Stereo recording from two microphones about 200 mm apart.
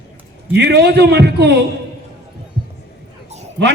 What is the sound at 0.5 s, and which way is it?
A man's voice, 55° right (ahead or behind).